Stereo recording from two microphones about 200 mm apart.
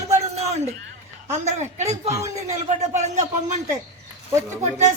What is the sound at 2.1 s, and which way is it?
Speech, 15° right (ahead or behind).